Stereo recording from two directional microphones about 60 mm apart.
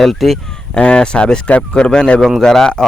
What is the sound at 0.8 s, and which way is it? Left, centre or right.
Speech, centre.